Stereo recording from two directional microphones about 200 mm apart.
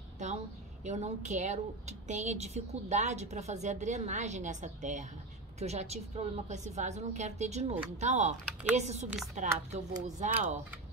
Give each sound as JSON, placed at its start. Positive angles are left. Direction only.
{"t": 0.8, "sound": "a woman's voice", "side_deg": -35}